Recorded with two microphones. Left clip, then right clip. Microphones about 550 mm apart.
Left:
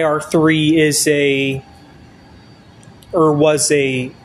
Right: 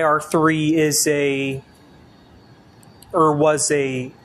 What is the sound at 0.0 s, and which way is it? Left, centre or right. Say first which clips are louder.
Speech: left 2 dB; right.